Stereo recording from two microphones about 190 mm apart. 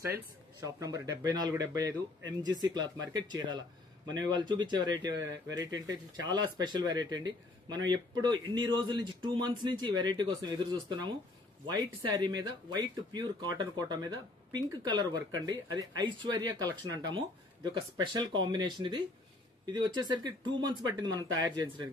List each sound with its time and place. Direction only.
0.7 s speech: 20° right (ahead or behind)